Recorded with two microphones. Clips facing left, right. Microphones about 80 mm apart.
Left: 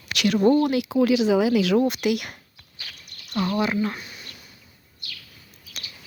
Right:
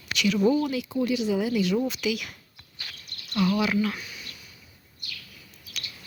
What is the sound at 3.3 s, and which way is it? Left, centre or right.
Speech, left.